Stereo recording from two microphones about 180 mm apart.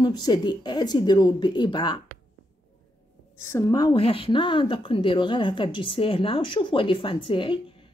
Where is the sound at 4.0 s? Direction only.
30° left (ahead or behind).